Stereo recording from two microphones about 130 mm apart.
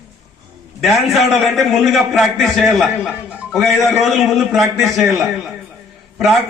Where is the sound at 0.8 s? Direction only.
Centre (ahead or behind).